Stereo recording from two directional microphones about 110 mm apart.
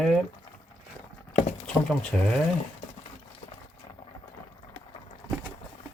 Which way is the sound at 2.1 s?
10° left (ahead or behind).